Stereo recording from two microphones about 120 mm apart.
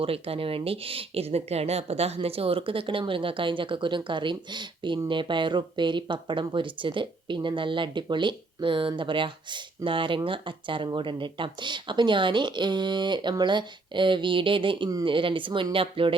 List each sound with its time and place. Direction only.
0.0 s speech: 50° right (ahead or behind)